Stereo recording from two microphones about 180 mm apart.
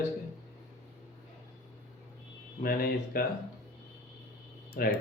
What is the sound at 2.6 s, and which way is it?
Speech, 55° left (ahead or behind).